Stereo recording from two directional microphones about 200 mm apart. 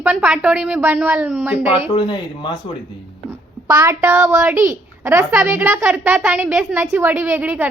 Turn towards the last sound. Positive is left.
turn(degrees=-10)  # may be behind; listen again after turning